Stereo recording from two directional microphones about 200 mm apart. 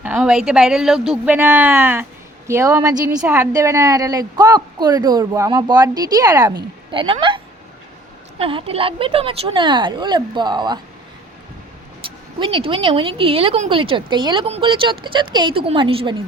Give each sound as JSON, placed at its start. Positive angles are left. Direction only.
{"t": 0.0, "sound": "a woman's voice", "side_deg": -5}
{"t": 12.0, "sound": "a sound", "side_deg": -25}
{"t": 12.4, "sound": "speech", "side_deg": -25}